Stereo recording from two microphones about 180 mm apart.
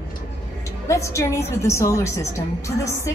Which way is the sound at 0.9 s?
15° left (ahead or behind).